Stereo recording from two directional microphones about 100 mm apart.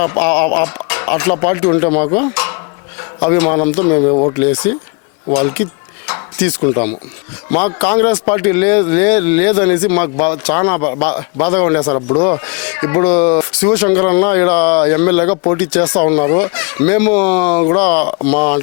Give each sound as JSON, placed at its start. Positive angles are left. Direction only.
{"t": 0.0, "sound": "speech", "side_deg": 20}
{"t": 4.4, "sound": "speech", "side_deg": 20}